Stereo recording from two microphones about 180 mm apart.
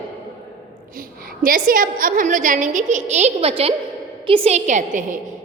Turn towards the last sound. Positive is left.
turn(degrees=-40)  # may be behind; listen again after turning